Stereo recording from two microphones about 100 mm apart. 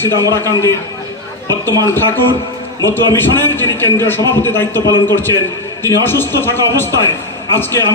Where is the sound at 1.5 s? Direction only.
40° right (ahead or behind).